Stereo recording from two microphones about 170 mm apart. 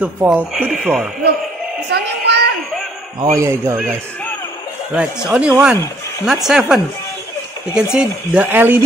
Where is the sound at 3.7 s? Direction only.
5° right (ahead or behind).